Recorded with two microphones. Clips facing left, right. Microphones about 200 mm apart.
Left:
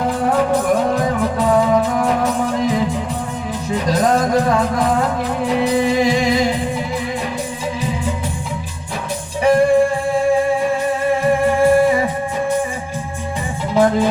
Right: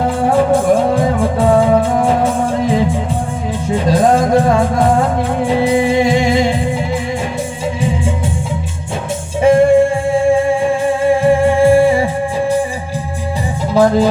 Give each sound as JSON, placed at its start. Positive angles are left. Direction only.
{"t": 0.1, "sound": "music", "side_deg": -25}
{"t": 9.4, "sound": "music", "side_deg": -25}
{"t": 13.7, "sound": "music", "side_deg": -35}